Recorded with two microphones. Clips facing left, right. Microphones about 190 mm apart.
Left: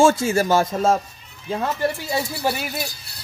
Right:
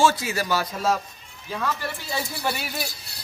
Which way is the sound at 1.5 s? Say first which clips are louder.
Left 4 dB; 30° left (ahead or behind).